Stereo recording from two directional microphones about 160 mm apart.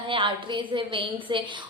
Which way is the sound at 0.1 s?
30° right (ahead or behind).